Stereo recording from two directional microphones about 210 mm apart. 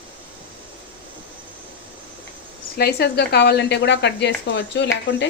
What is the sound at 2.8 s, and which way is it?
Speech, 50° left (ahead or behind).